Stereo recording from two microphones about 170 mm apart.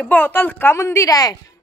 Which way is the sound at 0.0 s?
10° left (ahead or behind).